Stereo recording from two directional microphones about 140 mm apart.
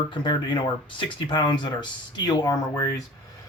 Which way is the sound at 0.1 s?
30° left (ahead or behind).